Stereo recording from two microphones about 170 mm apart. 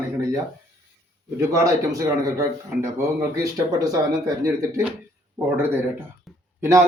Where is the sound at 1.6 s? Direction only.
20° right (ahead or behind).